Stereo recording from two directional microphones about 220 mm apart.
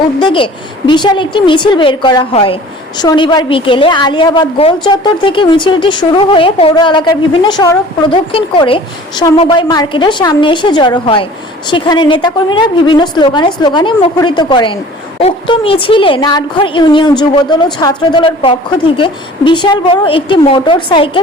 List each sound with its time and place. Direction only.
0.2 s a woman's voice: 20° left (ahead or behind)